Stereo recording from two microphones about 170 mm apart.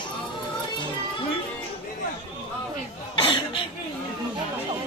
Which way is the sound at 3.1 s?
30° left (ahead or behind).